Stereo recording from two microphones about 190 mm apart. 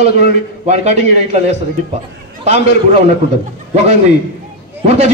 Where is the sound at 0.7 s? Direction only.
35° right (ahead or behind).